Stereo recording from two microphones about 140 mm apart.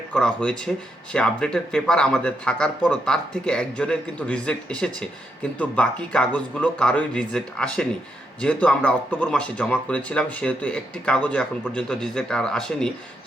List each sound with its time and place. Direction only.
0.1 s speech: 5° left (ahead or behind)